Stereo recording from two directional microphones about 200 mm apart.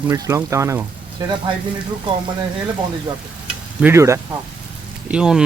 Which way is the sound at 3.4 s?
5° right (ahead or behind).